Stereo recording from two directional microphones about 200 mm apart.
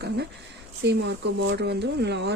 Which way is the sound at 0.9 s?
60° right (ahead or behind).